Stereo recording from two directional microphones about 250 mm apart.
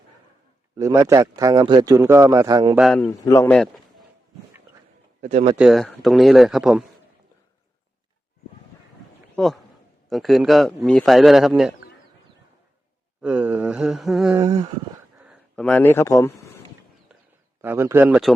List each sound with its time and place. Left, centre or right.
0.8 s speech: centre
2.7 s speech: centre
5.2 s speech: right
5.5 s speech: centre
9.3 s speech: centre
13.2 s speech: centre
14.3 s speech: centre
15.2 s speech: centre
17.1 s a sound: centre
17.6 s speech: centre